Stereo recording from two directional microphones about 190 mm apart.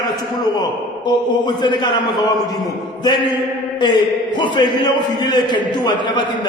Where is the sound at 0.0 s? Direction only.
20° left (ahead or behind).